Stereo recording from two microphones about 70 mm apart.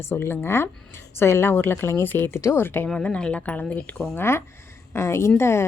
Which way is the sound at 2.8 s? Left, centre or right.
Centre.